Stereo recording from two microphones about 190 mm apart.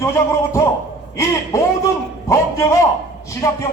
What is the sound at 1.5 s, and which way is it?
A man's voice, 20° left (ahead or behind).